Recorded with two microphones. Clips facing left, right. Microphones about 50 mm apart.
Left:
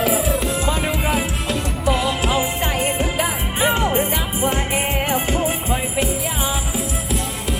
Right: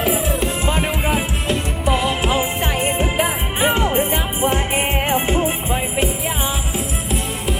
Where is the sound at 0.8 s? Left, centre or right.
Centre.